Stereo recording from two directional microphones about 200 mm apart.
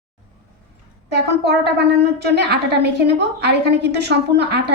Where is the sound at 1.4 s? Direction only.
55° right (ahead or behind).